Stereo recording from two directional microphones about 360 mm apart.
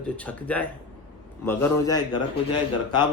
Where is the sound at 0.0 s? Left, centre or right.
Centre.